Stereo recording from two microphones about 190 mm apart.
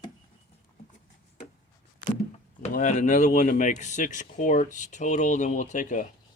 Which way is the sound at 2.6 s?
40° left (ahead or behind).